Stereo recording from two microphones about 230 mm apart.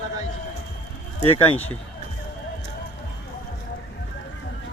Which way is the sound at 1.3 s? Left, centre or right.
Centre.